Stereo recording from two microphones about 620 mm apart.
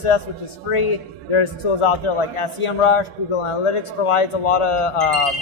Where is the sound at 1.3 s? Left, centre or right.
Left.